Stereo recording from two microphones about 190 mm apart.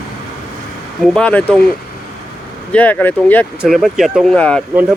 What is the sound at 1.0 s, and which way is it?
Speech, 5° left (ahead or behind).